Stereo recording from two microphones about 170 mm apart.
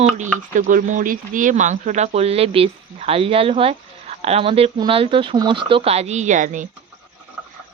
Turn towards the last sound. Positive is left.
turn(degrees=-50)  # may be behind; listen again after turning